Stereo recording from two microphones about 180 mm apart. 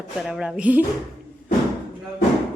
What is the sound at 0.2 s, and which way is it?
Speech, 5° right (ahead or behind).